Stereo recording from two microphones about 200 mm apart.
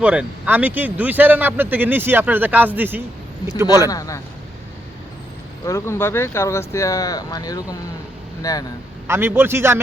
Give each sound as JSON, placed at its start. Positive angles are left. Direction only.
{"t": 0.0, "sound": "a man's voice", "side_deg": -5}
{"t": 3.8, "sound": "speech", "side_deg": 15}
{"t": 5.6, "sound": "speech", "side_deg": 15}
{"t": 9.0, "sound": "a man's voice", "side_deg": -10}